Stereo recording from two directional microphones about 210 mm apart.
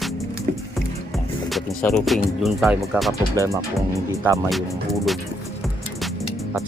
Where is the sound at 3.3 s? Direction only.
15° right (ahead or behind).